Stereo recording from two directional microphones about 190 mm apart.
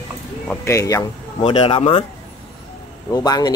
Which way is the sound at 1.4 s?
30° left (ahead or behind).